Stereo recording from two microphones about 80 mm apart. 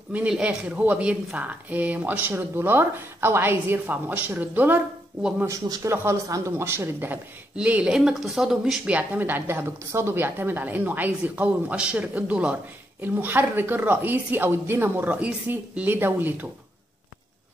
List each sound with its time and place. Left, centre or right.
0.3 s speech: centre
5.9 s speech: right
7.5 s speech: centre
8.8 s speech: centre